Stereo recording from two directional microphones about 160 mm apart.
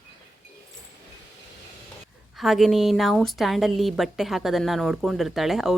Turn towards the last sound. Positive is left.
turn(degrees=0)  # may be behind; listen again after turning